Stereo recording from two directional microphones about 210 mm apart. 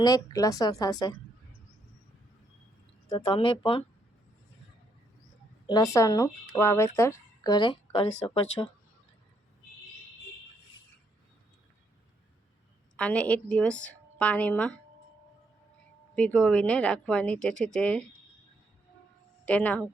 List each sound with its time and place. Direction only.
0.0 s speech: 15° left (ahead or behind)
3.1 s speech: 25° left (ahead or behind)
5.6 s speech: 15° left (ahead or behind)
13.0 s speech: 5° left (ahead or behind)
16.1 s speech: 5° left (ahead or behind)
19.5 s speech: 5° left (ahead or behind)